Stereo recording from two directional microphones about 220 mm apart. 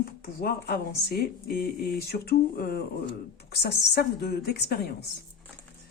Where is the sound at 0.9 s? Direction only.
45° left (ahead or behind).